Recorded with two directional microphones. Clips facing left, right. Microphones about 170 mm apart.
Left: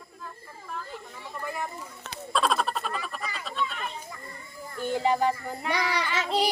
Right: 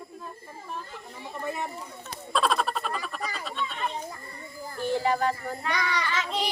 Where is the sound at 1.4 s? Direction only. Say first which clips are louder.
Right 2 dB; 25° right (ahead or behind).